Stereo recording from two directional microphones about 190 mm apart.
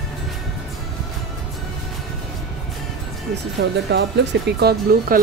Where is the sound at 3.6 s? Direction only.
65° right (ahead or behind).